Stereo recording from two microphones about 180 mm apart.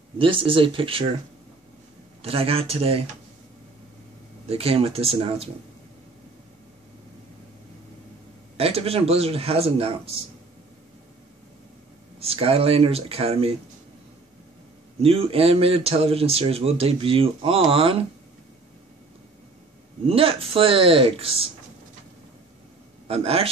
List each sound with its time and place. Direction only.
0.2 s speech: 30° right (ahead or behind)
2.2 s a man's voice: 30° right (ahead or behind)
4.5 s a man's voice: 35° right (ahead or behind)
8.5 s a man's voice: 35° right (ahead or behind)
12.2 s a man's voice: 30° right (ahead or behind)
15.0 s a man's voice: 35° right (ahead or behind)
20.1 s a man's voice: 30° right (ahead or behind)
23.0 s a man's voice: 35° right (ahead or behind)